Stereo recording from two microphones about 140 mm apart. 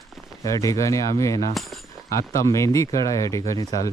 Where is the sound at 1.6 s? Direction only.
Centre (ahead or behind).